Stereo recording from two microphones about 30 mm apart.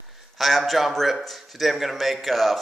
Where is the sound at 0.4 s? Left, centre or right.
Centre.